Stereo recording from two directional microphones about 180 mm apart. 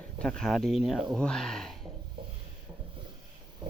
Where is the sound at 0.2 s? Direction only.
5° left (ahead or behind).